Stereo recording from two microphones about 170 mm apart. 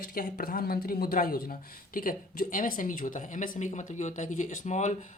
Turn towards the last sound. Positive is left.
turn(degrees=45)  # may be behind; listen again after turning